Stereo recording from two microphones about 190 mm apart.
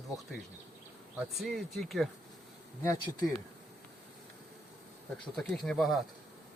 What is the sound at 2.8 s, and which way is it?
Speech, 15° left (ahead or behind).